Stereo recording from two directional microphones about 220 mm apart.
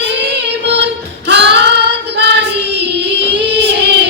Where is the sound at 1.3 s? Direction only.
50° right (ahead or behind).